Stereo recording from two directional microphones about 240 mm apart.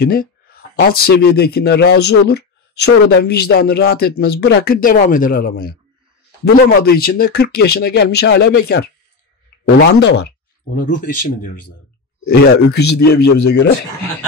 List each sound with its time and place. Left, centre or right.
0.0 s speech: left
10.8 s speech: left
12.6 s speech: left